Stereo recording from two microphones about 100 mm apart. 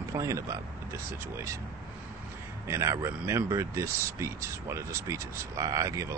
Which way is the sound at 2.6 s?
30° right (ahead or behind).